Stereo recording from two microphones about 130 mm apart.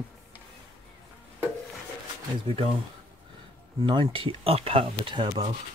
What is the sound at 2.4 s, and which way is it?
Speech, 45° right (ahead or behind).